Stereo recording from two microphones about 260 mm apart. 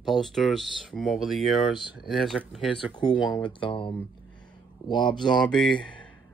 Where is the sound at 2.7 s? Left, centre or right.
Centre.